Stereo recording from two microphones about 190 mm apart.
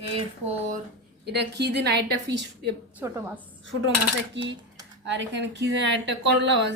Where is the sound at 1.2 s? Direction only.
65° right (ahead or behind).